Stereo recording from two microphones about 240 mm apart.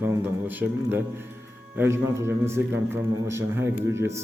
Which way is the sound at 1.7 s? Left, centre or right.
Centre.